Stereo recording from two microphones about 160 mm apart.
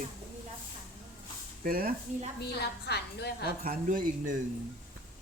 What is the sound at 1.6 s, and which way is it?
Speech, 65° right (ahead or behind).